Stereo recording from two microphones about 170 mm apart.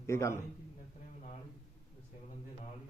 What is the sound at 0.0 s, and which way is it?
Speech, 15° left (ahead or behind).